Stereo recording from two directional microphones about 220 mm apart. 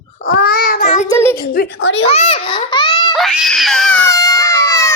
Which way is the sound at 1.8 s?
60° left (ahead or behind).